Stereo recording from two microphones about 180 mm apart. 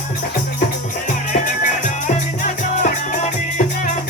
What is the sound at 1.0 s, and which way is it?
Music, 45° left (ahead or behind).